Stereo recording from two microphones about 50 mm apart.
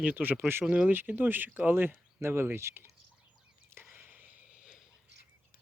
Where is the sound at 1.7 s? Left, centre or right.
Right.